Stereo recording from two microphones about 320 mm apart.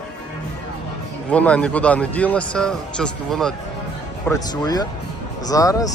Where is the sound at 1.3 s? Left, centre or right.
Centre.